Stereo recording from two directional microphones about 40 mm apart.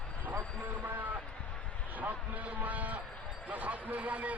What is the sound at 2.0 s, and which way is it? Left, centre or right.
A man's voice, right.